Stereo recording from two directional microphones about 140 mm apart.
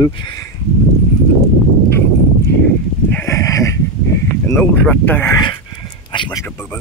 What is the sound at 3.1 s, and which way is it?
Speech, 20° left (ahead or behind).